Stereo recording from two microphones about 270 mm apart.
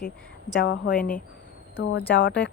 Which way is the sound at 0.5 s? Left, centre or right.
Left.